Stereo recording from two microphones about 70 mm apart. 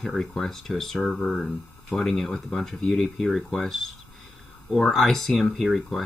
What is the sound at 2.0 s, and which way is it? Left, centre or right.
Speech, centre.